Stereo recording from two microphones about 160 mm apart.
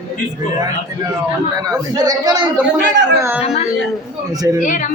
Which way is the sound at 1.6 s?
25° right (ahead or behind).